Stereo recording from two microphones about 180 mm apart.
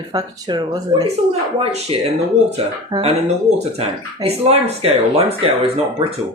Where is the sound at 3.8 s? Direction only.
35° right (ahead or behind).